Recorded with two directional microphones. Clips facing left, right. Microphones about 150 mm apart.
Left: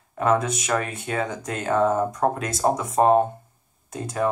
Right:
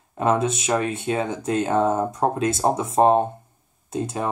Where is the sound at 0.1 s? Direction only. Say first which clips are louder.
Right 1 dB; 25° right (ahead or behind).